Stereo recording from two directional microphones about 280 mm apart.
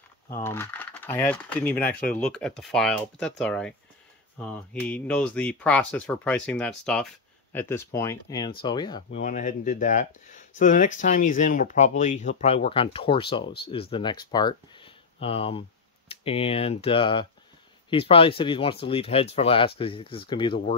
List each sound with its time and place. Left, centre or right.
0.3 s speech: centre
9.2 s speech: left